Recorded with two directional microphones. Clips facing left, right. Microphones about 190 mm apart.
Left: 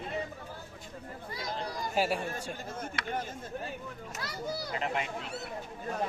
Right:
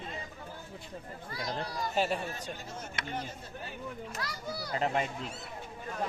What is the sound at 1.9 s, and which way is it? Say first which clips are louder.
Speech: left 1 dB; 10° left (ahead or behind).